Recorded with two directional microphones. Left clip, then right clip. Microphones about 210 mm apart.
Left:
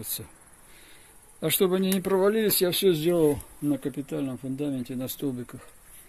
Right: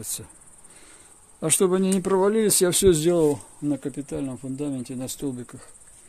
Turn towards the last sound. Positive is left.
turn(degrees=0)  # may be behind; listen again after turning